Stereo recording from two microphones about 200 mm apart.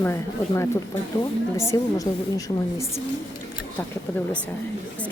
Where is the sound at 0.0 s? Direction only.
15° left (ahead or behind).